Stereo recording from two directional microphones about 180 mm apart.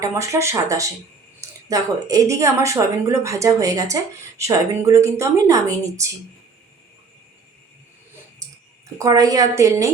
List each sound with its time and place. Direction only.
0.0 s a woman's voice: 15° right (ahead or behind)
9.0 s a woman's voice: 20° right (ahead or behind)